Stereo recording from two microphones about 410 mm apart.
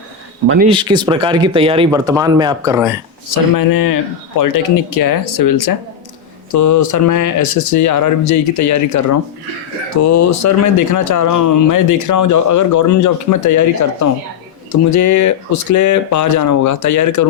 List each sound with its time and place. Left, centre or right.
0.4 s speech: right
0.7 s speech: centre
3.2 s speech: left